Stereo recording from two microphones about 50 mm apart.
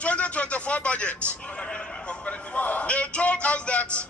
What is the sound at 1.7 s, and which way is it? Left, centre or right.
A man's voice, left.